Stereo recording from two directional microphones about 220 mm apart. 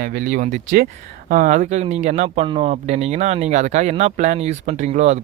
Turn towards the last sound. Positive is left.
turn(degrees=-30)  # may be behind; listen again after turning